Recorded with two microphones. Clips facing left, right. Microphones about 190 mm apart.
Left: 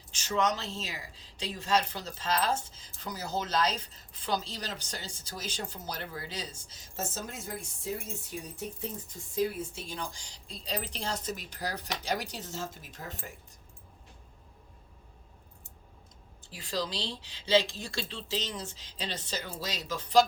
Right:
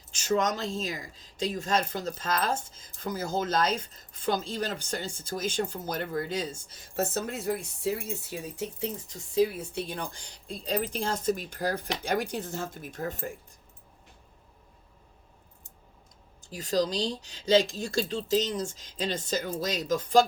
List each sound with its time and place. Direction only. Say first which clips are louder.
0.3 s speech: right 3 dB; 45° right (ahead or behind)
16.4 s speech: right 7 dB; 40° right (ahead or behind)